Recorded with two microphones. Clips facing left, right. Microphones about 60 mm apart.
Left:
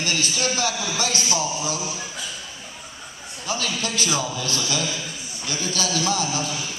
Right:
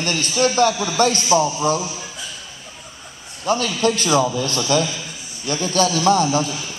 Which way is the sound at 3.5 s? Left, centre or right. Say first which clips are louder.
Right 9 dB; right.